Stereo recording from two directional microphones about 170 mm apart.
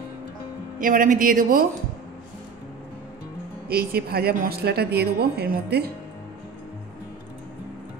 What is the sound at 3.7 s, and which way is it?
Speech, 60° right (ahead or behind).